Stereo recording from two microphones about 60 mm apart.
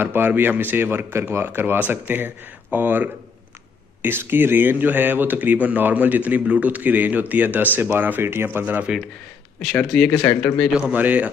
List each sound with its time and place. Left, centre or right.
0.0 s speech: right
8.5 s a man's voice: right
8.8 s speech: centre
9.8 s speech: centre
10.8 s a man's voice: right